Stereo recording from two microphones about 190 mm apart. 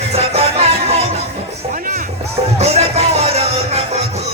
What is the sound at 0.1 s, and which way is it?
Music, 35° right (ahead or behind).